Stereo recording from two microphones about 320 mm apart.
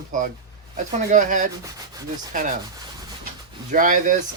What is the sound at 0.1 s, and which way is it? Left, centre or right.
Speech, right.